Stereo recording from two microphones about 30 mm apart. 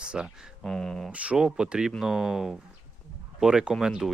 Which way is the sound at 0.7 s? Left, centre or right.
Left.